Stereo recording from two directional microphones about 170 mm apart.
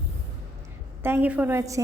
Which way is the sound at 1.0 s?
10° right (ahead or behind).